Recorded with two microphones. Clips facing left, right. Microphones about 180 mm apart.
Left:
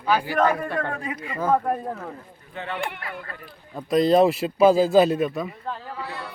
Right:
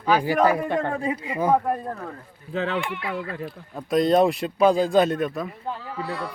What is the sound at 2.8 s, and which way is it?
Speech, 50° left (ahead or behind).